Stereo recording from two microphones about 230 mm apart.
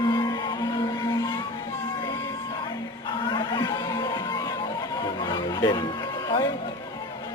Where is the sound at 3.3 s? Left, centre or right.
Centre.